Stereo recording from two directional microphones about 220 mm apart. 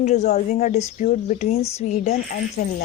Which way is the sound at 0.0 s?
30° left (ahead or behind).